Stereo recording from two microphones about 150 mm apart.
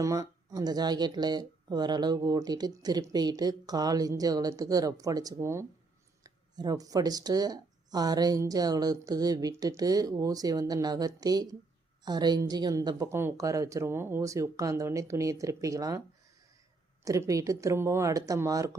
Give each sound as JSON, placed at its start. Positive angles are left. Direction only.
{"t": 0.0, "sound": "speech", "side_deg": -25}
{"t": 17.0, "sound": "speech", "side_deg": -20}